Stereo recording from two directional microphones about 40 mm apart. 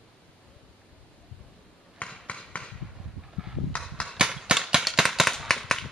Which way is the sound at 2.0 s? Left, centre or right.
Left.